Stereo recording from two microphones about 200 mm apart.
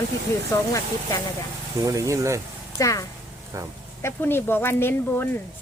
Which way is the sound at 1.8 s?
15° right (ahead or behind).